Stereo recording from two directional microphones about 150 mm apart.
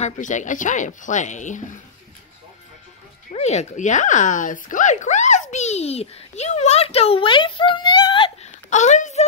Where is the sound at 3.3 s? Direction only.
50° left (ahead or behind); by 8.3 s 30° left (ahead or behind).